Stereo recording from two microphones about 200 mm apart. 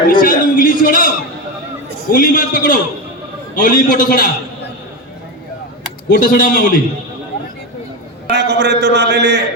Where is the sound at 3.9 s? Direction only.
45° left (ahead or behind).